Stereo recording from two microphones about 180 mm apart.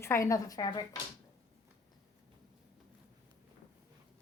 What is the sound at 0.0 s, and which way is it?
Speech, 15° left (ahead or behind).